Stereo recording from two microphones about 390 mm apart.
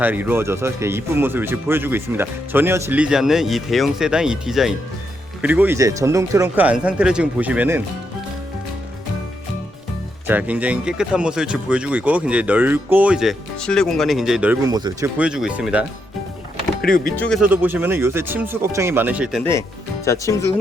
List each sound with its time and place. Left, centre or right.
0.0 s speech: centre
10.2 s speech: centre
16.8 s speech: left
17.2 s speech: centre